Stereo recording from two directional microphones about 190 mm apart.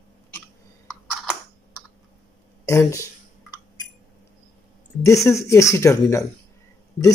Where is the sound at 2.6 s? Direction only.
15° left (ahead or behind).